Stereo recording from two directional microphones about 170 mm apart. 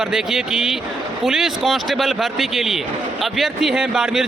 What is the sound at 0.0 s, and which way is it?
Speech, 5° right (ahead or behind).